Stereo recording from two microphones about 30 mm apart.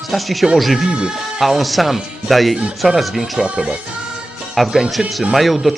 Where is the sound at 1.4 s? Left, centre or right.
Centre.